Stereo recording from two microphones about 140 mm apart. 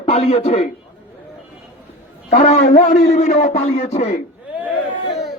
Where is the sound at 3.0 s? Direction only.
55° left (ahead or behind).